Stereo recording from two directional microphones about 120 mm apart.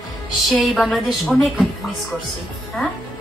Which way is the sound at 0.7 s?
Centre (ahead or behind).